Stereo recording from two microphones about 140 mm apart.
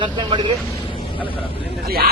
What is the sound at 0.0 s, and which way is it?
Speech, 30° right (ahead or behind).